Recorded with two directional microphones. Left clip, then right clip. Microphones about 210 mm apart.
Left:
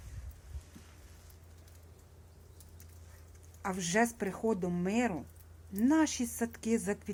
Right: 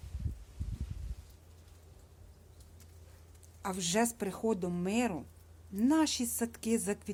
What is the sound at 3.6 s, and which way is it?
A woman's voice, 15° right (ahead or behind).